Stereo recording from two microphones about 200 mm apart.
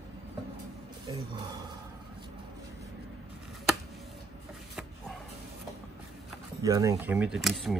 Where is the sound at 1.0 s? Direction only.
20° right (ahead or behind).